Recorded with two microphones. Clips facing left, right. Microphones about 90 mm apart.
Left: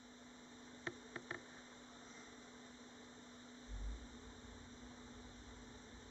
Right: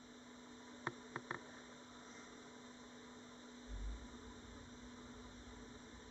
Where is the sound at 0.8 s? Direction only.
25° right (ahead or behind).